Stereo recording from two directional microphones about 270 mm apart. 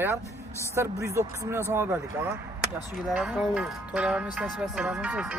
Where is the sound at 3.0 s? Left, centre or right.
Centre.